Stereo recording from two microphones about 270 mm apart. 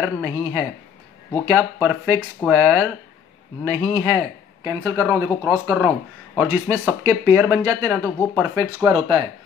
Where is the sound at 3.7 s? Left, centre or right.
Centre.